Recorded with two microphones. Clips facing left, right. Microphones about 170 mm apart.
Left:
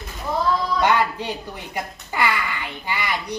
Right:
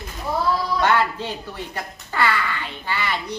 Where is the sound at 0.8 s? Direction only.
15° left (ahead or behind).